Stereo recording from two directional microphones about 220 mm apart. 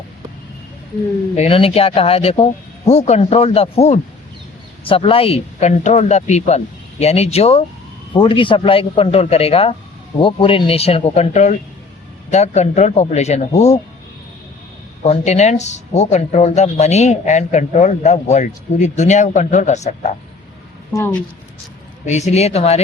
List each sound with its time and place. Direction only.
1.4 s a man's voice: 25° left (ahead or behind)
15.0 s a man's voice: 30° left (ahead or behind)
20.9 s speech: 10° left (ahead or behind)
22.0 s speech: 30° left (ahead or behind)